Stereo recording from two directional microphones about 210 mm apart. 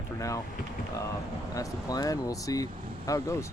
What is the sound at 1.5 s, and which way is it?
Speech, 15° left (ahead or behind).